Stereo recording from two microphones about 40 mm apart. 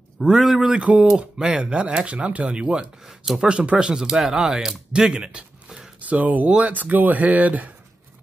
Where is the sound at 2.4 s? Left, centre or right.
Right.